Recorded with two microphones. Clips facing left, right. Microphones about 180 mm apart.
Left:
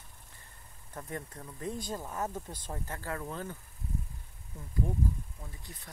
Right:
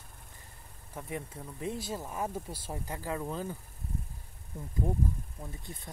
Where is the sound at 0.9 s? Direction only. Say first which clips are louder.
Right 2 dB; 5° right (ahead or behind).